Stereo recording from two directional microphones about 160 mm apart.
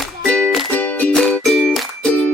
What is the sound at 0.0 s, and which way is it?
Music, 5° left (ahead or behind).